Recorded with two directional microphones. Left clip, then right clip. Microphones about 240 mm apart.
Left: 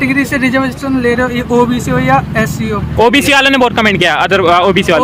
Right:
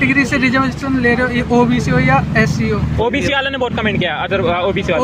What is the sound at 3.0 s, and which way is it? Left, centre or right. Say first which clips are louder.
Speech: left 9 dB; left.